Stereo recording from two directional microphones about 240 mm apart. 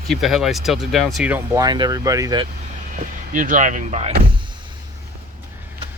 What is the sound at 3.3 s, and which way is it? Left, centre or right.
Speech, right.